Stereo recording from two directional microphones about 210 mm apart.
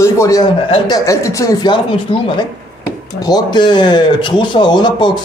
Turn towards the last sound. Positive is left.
turn(degrees=20)  # may be behind; listen again after turning